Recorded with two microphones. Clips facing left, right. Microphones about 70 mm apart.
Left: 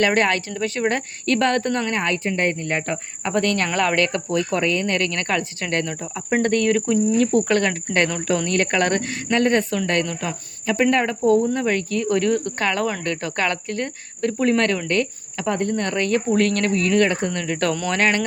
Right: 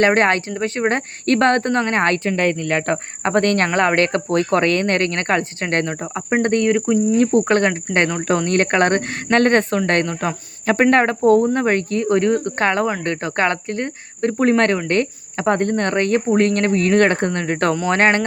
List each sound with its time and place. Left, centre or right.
0.0 s speech: right
2.2 s speech: right
2.8 s speech: right
4.9 s speech: right
8.4 s speech: right
9.3 s speech: right
9.7 s speech: right
10.7 s speech: right
17.3 s speech: right